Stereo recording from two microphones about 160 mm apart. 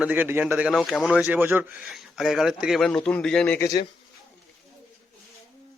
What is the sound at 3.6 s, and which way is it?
Speech, 25° left (ahead or behind).